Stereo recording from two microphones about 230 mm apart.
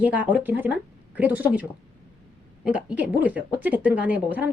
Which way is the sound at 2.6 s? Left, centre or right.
Centre.